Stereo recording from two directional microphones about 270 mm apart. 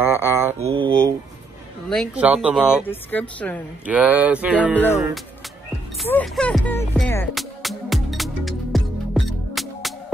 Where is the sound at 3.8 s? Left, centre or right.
Centre.